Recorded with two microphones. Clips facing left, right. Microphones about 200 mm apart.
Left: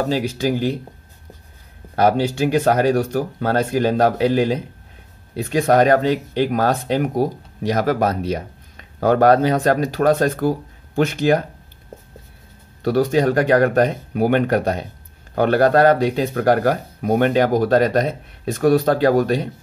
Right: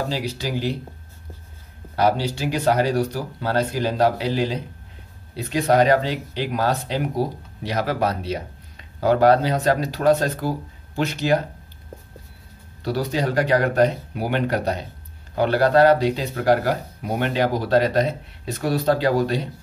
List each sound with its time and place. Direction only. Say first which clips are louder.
0.1 s speech: left 6 dB; 50° left (ahead or behind)
2.0 s speech: left 4 dB; 50° left (ahead or behind)
12.8 s speech: left 7 dB; 50° left (ahead or behind)